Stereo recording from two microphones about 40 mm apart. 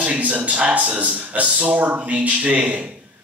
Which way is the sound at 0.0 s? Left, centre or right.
Right.